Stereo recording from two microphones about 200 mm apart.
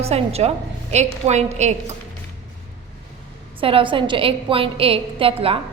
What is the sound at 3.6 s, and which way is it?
A woman's voice, 25° right (ahead or behind).